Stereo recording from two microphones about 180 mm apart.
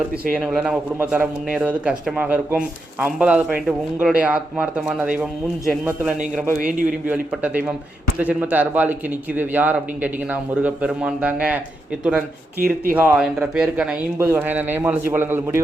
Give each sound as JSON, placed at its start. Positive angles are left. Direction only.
{"t": 0.3, "sound": "speech", "side_deg": 0}
{"t": 6.6, "sound": "a man's voice", "side_deg": -50}
{"t": 7.1, "sound": "speech", "side_deg": -10}
{"t": 12.5, "sound": "speech", "side_deg": -55}
{"t": 12.9, "sound": "speech", "side_deg": -10}